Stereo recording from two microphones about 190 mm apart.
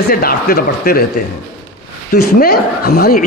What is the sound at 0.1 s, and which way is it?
A man's voice, 50° left (ahead or behind).